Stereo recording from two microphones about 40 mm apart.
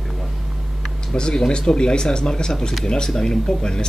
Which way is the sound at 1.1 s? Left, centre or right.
Centre.